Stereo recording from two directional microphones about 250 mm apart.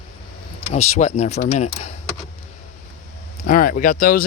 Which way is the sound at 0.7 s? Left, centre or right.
Left.